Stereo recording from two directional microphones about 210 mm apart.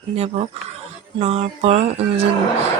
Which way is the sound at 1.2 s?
30° right (ahead or behind).